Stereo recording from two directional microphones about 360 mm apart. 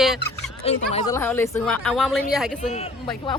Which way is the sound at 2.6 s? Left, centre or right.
Centre.